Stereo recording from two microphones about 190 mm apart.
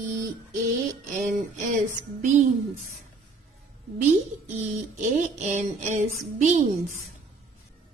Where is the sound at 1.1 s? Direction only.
45° right (ahead or behind).